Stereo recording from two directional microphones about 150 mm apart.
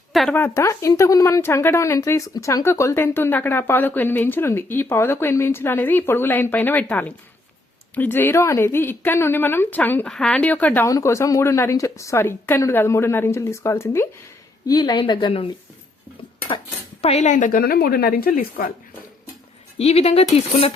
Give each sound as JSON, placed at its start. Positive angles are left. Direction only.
{"t": 0.1, "sound": "speech", "side_deg": 0}
{"t": 0.3, "sound": "a woman's voice", "side_deg": 15}
{"t": 14.7, "sound": "speech", "side_deg": 30}
{"t": 17.0, "sound": "a woman's voice", "side_deg": 45}
{"t": 19.8, "sound": "speech", "side_deg": 45}